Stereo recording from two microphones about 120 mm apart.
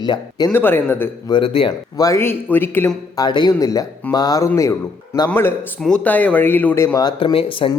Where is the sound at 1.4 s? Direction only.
50° left (ahead or behind).